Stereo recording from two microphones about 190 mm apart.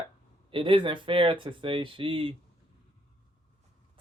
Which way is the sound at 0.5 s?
25° right (ahead or behind).